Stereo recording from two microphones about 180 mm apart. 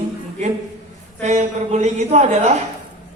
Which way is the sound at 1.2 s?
40° right (ahead or behind).